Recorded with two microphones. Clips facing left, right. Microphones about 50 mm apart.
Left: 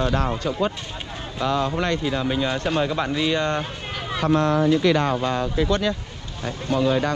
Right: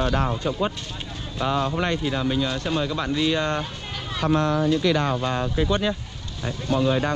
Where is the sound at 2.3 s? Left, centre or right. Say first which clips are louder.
Left 2 dB; centre.